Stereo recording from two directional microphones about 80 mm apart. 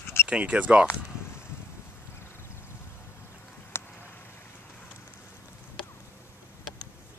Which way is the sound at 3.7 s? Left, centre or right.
Left.